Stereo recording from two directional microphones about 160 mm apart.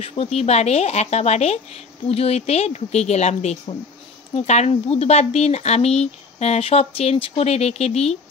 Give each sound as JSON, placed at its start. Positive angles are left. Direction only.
{"t": 0.0, "sound": "speech", "side_deg": 35}